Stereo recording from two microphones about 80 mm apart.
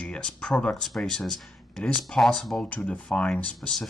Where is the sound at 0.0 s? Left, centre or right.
Centre.